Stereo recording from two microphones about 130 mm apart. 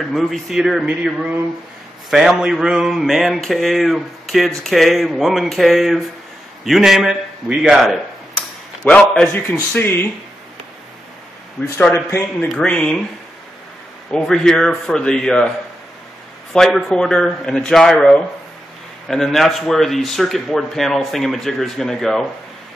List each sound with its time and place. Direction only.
0.0 s speech: centre (ahead or behind)
9.6 s speech: 15° left (ahead or behind)
11.7 s a man's voice: 20° left (ahead or behind)
12.4 s speech: 10° left (ahead or behind)
14.1 s speech: 5° left (ahead or behind)
16.5 s speech: centre (ahead or behind)